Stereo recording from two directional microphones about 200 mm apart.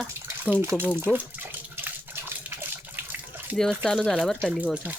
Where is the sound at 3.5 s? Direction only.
5° left (ahead or behind).